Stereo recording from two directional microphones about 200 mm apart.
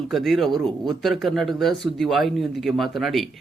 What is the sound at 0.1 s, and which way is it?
Speech, centre (ahead or behind).